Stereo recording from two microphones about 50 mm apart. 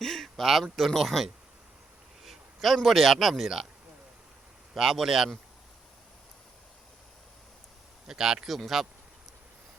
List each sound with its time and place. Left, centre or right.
0.0 s speech: centre
2.2 s a sound: centre
2.8 s speech: centre
4.7 s speech: centre
8.0 s speech: centre